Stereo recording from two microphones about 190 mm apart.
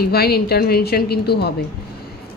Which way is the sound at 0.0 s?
55° left (ahead or behind).